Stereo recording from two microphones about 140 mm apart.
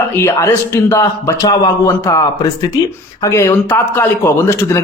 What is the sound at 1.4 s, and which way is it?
Speech, 30° left (ahead or behind).